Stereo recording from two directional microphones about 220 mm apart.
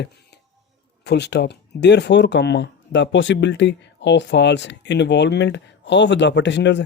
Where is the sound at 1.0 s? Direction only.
50° left (ahead or behind).